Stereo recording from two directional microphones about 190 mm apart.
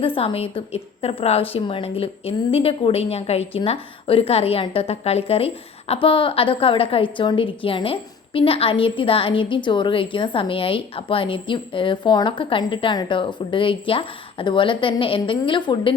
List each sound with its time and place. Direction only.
0.0 s a woman's voice: 30° left (ahead or behind)